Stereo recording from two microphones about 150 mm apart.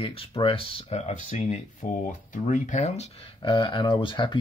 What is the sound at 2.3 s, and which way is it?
Speech, 55° left (ahead or behind).